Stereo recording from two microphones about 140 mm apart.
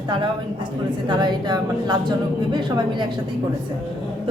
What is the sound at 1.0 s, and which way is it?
A woman's voice, 30° right (ahead or behind).